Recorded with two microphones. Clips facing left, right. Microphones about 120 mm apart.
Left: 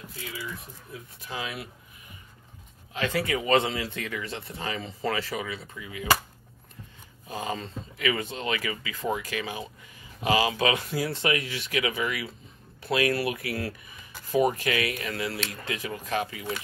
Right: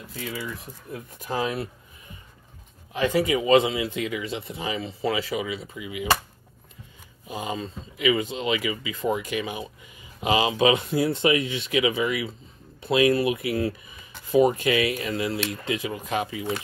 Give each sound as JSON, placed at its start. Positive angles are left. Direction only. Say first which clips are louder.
{"t": 0.9, "sound": "speech", "louder": "right 8 dB", "side_deg": -45}
{"t": 2.9, "sound": "speech", "louder": "right 5 dB", "side_deg": -20}
{"t": 7.2, "sound": "speech", "louder": "right 2 dB", "side_deg": -15}